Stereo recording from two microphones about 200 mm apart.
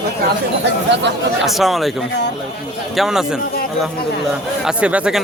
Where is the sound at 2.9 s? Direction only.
Centre (ahead or behind).